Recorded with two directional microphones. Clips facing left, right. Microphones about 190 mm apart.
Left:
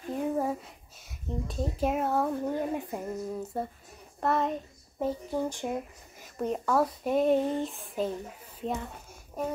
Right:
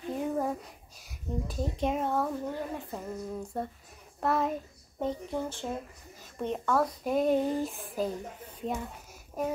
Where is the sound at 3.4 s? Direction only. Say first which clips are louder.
Left 1 dB; 5° left (ahead or behind).